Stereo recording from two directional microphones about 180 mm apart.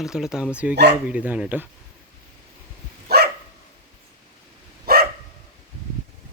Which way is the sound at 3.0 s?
60° right (ahead or behind).